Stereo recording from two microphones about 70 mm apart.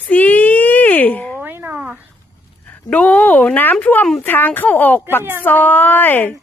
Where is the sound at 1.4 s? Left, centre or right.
Right.